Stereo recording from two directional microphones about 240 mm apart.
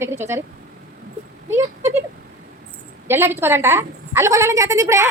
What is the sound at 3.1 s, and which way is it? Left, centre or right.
A woman's voice, centre.